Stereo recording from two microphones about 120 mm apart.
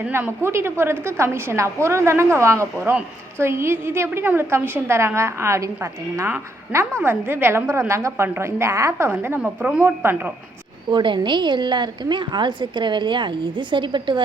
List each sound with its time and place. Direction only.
0.0 s a woman's voice: 20° right (ahead or behind)
9.4 s a woman's voice: 10° right (ahead or behind)
9.8 s a woman's voice: 20° right (ahead or behind)
10.9 s a woman's voice: 40° right (ahead or behind)